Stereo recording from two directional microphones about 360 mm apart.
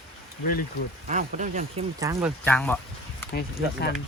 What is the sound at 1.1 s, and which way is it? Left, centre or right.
Speech, right.